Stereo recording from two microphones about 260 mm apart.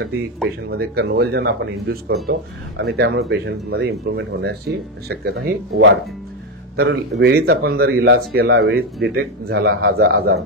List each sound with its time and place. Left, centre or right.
0.7 s speech: right